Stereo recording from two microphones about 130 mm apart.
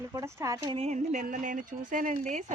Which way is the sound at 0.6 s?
45° right (ahead or behind).